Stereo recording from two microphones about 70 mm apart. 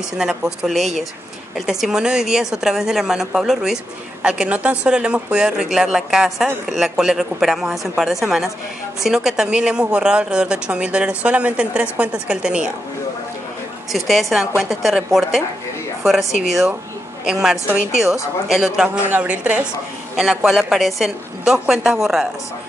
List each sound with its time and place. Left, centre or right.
0.2 s a woman's voice: centre
13.9 s a woman's voice: centre
19.1 s a woman's voice: right
20.2 s a woman's voice: centre